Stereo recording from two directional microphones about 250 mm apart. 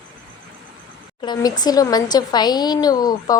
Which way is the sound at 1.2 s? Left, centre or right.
Centre.